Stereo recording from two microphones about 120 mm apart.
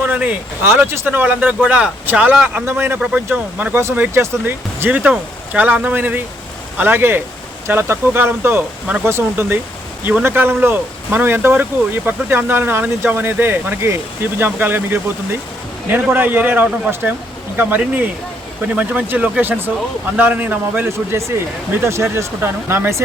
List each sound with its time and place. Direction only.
0.0 s a man's voice: 10° right (ahead or behind)